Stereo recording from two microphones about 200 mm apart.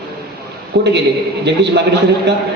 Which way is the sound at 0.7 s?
55° right (ahead or behind).